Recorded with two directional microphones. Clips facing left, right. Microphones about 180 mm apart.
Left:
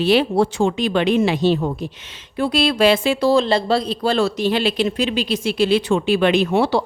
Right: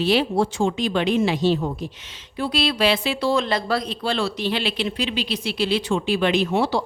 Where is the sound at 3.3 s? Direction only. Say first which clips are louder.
Left 5 dB; 30° left (ahead or behind).